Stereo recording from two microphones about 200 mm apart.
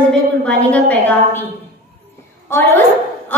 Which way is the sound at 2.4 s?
10° left (ahead or behind).